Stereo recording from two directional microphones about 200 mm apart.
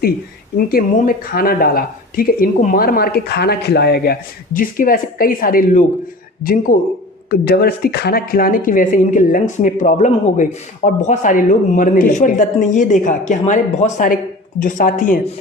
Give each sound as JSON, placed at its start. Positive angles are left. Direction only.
{"t": 0.5, "sound": "speech", "side_deg": 45}